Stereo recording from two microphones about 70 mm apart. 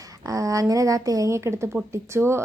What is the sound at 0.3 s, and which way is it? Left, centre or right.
A woman's voice, right.